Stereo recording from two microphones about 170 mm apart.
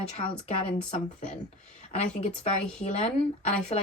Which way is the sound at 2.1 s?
40° left (ahead or behind).